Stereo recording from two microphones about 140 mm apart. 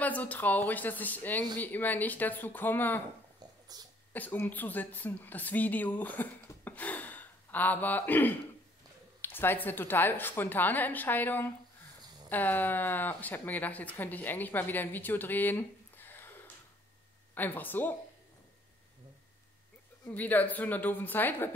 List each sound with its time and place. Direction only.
0.0 s speech: 10° left (ahead or behind)
3.7 s speech: 25° right (ahead or behind)
4.1 s a woman's voice: 10° left (ahead or behind)
17.3 s speech: 15° left (ahead or behind)
20.2 s speech: 10° left (ahead or behind)